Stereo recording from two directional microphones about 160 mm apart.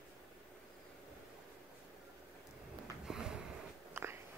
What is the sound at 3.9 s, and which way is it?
Biting, 15° right (ahead or behind).